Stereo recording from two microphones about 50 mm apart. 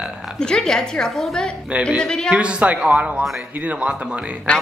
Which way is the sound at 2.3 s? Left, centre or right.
Right.